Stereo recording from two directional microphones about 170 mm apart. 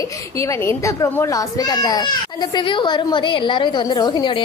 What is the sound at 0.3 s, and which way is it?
A child's voice, 15° left (ahead or behind).